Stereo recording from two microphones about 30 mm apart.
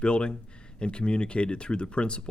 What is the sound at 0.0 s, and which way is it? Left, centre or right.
Speech, left.